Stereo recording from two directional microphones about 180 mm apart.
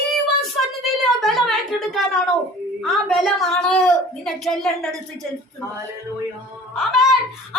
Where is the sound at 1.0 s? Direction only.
Centre (ahead or behind).